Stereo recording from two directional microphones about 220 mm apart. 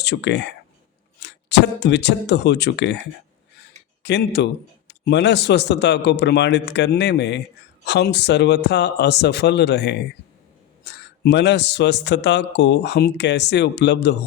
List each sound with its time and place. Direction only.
0.0 s a man's voice: 50° left (ahead or behind)
4.0 s a man's voice: 50° left (ahead or behind)